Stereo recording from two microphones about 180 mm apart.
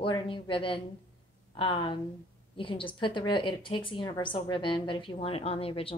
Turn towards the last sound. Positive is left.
turn(degrees=30)  # may be behind; listen again after turning